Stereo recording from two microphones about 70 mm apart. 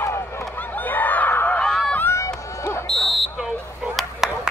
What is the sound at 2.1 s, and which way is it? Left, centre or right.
Run, left.